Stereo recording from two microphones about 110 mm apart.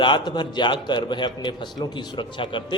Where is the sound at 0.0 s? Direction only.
45° left (ahead or behind).